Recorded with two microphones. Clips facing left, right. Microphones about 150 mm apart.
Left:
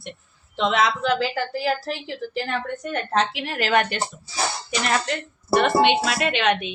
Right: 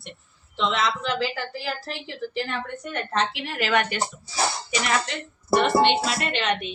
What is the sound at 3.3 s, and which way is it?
Speech, 45° left (ahead or behind).